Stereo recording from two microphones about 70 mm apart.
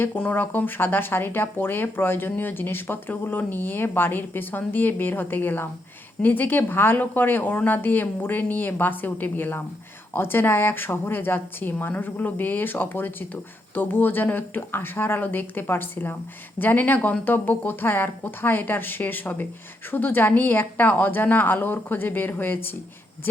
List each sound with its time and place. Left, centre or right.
0.2 s a woman's voice: left